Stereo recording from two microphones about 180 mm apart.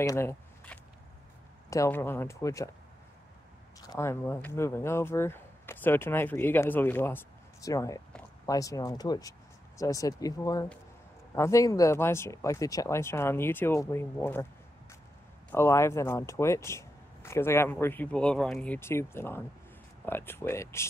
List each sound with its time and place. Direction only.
0.0 s speech: 15° left (ahead or behind)
3.8 s speech: 20° left (ahead or behind)